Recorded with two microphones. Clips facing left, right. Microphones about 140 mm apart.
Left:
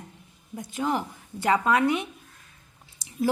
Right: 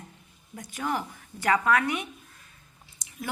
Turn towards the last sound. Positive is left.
turn(degrees=35)  # may be behind; listen again after turning